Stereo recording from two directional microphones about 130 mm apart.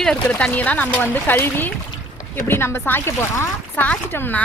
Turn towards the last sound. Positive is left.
turn(degrees=15)  # may be behind; listen again after turning